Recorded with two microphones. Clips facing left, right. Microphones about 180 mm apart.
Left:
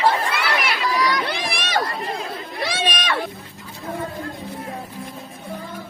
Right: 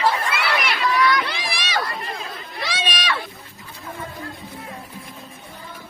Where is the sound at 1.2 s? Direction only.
60° left (ahead or behind).